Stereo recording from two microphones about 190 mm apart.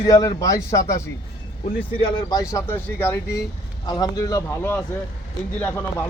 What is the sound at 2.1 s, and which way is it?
Speech, 20° left (ahead or behind).